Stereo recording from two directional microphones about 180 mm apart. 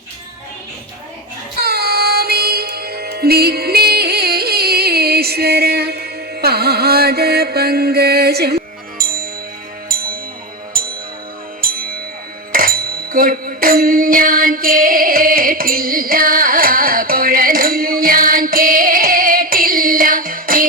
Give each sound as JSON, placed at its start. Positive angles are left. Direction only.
{"t": 1.5, "sound": "music", "side_deg": -60}
{"t": 12.5, "sound": "music", "side_deg": -50}